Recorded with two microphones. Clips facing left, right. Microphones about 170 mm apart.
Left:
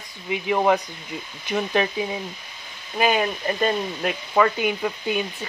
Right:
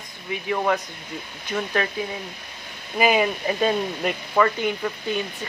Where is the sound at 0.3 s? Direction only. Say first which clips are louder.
Left 3 dB; 20° left (ahead or behind).